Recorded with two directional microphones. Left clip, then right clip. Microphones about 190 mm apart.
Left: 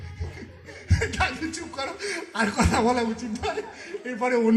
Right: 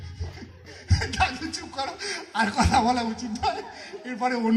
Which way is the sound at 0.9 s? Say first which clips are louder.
Right 1 dB; 15° left (ahead or behind).